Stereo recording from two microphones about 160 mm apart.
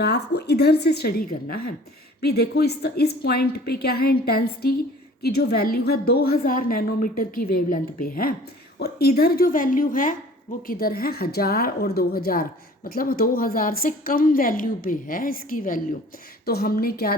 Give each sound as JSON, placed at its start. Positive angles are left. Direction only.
{"t": 0.0, "sound": "a woman's voice", "side_deg": 90}
{"t": 2.2, "sound": "a woman's voice", "side_deg": 90}
{"t": 10.7, "sound": "a woman's voice", "side_deg": 70}
{"t": 16.5, "sound": "a woman's voice", "side_deg": 70}